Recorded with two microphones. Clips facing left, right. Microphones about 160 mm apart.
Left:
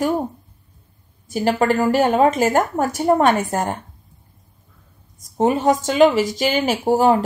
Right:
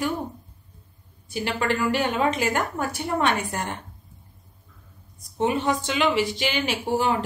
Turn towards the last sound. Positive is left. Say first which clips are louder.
# left 8 dB
turn(degrees=40)  # may be behind; listen again after turning